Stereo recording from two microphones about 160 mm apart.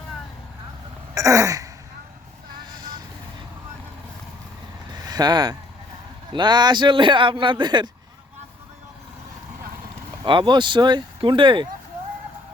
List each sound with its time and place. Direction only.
1.1 s throat clearing: 20° right (ahead or behind)
5.0 s a man's voice: 25° right (ahead or behind)
10.2 s a man's voice: 30° right (ahead or behind)